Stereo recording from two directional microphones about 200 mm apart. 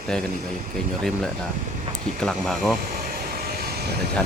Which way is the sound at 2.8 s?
45° right (ahead or behind).